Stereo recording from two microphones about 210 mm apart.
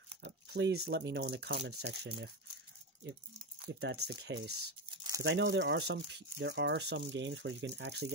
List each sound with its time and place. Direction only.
0.2 s speech: 55° right (ahead or behind)
3.6 s speech: 55° right (ahead or behind)
4.9 s crumpling: 20° right (ahead or behind)
5.2 s speech: 60° right (ahead or behind)